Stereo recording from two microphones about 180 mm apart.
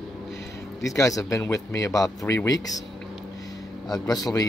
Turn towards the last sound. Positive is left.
turn(degrees=20)  # may be behind; listen again after turning